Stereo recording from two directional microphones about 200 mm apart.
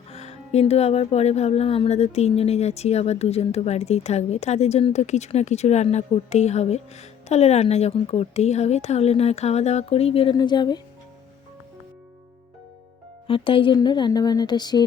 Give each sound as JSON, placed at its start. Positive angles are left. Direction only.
{"t": 0.1, "sound": "speech", "side_deg": 30}
{"t": 13.2, "sound": "speech", "side_deg": 25}